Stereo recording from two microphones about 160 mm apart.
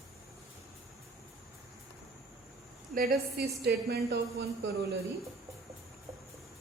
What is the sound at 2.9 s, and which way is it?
A woman's voice, 70° right (ahead or behind).